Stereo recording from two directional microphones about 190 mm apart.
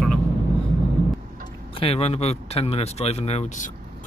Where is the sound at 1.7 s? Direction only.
30° left (ahead or behind).